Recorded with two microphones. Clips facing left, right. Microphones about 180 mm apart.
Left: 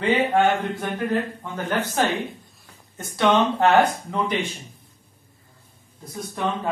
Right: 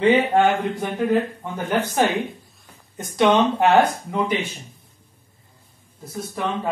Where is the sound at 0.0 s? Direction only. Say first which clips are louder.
Right 3 dB; 15° right (ahead or behind).